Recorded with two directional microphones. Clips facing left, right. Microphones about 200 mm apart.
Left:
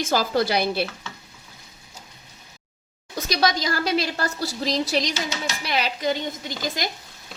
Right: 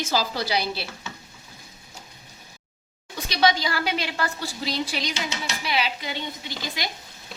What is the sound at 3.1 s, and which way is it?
A woman's voice, 40° left (ahead or behind).